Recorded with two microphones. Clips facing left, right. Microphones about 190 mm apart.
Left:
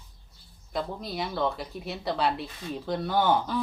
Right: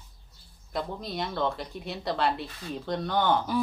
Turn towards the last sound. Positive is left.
turn(degrees=10)  # may be behind; listen again after turning